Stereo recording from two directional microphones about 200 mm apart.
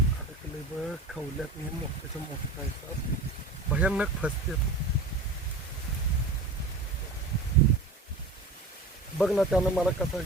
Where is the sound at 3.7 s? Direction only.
5° right (ahead or behind).